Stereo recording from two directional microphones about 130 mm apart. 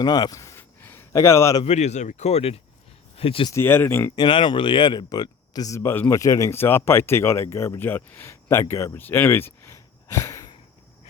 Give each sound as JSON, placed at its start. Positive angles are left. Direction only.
{"t": 0.0, "sound": "a man's voice", "side_deg": 30}
{"t": 1.6, "sound": "speech", "side_deg": 60}
{"t": 3.5, "sound": "speech", "side_deg": 15}
{"t": 4.1, "sound": "speech", "side_deg": 35}